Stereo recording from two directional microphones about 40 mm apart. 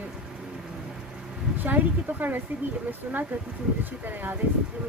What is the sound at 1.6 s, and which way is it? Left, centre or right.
Speech, right.